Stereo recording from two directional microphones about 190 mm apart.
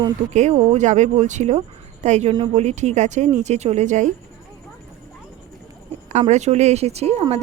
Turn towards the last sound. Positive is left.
turn(degrees=-35)  # may be behind; listen again after turning